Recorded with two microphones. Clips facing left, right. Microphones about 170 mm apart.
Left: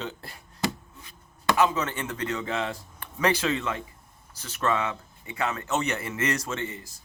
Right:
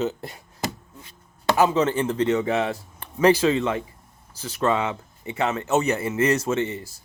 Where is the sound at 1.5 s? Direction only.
30° right (ahead or behind).